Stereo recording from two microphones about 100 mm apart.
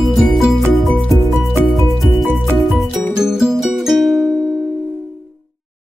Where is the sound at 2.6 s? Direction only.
Centre (ahead or behind).